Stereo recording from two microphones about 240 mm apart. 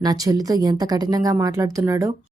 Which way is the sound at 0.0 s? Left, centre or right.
Centre.